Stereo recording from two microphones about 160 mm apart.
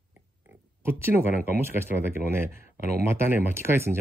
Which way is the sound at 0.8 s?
15° right (ahead or behind).